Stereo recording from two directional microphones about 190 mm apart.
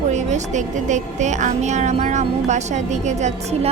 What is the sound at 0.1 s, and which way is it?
A woman's voice, 40° right (ahead or behind).